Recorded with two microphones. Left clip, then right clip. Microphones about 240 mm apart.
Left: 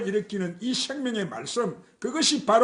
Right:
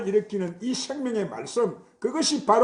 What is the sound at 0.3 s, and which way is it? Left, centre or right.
Speech, left.